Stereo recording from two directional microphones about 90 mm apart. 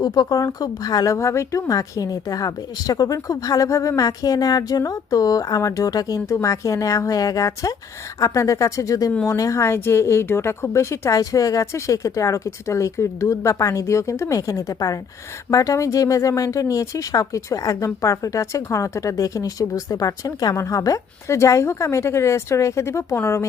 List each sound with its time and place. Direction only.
0.0 s speech: 50° left (ahead or behind); by 23.5 s 30° left (ahead or behind)